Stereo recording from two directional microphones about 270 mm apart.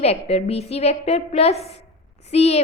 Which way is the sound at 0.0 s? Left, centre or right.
Left.